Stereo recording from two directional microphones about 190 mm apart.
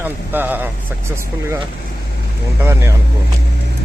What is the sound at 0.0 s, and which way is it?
Speech, 10° right (ahead or behind).